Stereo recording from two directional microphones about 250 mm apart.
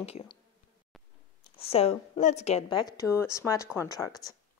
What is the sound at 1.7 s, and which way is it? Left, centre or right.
Speech, left.